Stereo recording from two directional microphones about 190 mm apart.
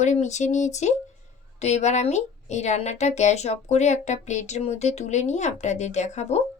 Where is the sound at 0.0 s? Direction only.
40° left (ahead or behind).